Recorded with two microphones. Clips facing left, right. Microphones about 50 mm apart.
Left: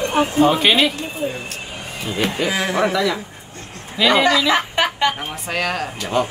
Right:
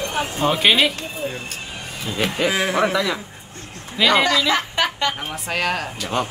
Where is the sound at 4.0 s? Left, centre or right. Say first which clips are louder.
Left 1 dB; centre.